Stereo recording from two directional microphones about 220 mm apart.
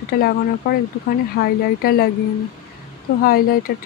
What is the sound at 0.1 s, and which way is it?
Speech, 45° left (ahead or behind).